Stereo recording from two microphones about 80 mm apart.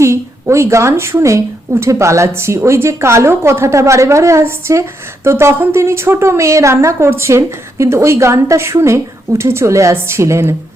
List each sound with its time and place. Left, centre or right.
0.0 s speech: right